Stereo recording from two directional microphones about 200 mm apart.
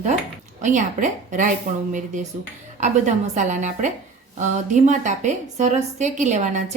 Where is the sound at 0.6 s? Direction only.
40° right (ahead or behind).